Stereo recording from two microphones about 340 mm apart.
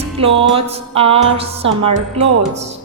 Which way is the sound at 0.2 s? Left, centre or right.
Centre.